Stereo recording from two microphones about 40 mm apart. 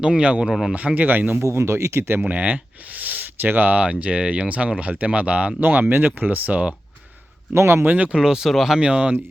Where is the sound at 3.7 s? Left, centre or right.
Right.